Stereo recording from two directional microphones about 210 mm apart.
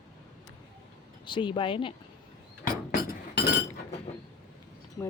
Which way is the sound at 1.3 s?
25° left (ahead or behind).